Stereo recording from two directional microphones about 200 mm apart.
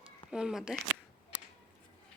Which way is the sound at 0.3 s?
5° right (ahead or behind).